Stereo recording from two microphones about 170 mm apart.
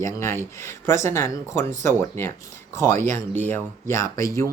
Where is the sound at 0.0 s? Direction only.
15° left (ahead or behind).